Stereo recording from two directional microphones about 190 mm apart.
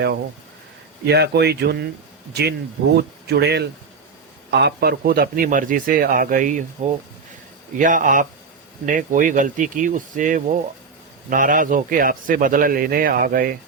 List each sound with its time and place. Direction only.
1.0 s a man's voice: 60° right (ahead or behind)